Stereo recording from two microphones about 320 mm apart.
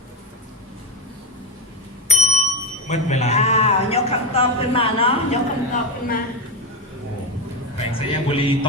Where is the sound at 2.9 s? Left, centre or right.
Left.